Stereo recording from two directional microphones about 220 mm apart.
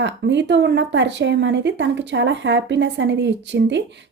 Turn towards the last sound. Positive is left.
turn(degrees=-55)  # may be behind; listen again after turning